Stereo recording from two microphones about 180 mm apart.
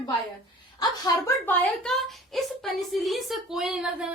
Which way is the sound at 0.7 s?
20° left (ahead or behind).